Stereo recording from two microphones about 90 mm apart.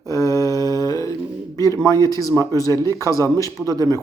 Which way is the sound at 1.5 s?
40° left (ahead or behind).